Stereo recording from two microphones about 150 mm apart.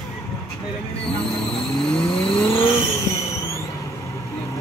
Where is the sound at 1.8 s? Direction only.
40° left (ahead or behind).